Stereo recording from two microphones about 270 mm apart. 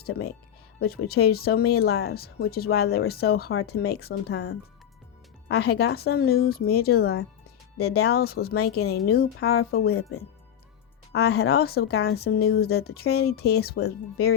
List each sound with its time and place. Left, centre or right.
0.0 s speech: left
11.1 s speech: left